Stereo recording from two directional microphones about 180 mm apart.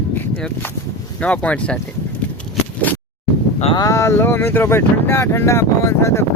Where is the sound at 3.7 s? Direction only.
20° left (ahead or behind).